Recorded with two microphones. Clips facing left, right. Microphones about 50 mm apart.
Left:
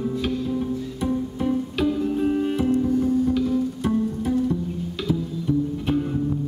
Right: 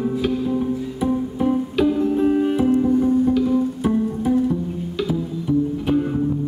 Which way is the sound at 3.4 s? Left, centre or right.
Centre.